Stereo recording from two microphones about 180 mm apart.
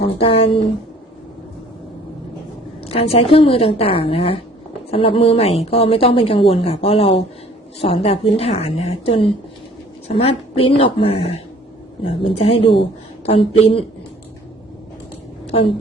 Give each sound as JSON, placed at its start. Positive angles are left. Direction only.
{"t": 0.0, "sound": "a woman's voice", "side_deg": 30}
{"t": 2.8, "sound": "a woman's voice", "side_deg": 35}